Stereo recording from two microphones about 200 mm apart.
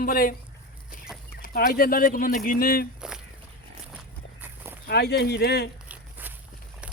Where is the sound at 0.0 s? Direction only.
45° left (ahead or behind).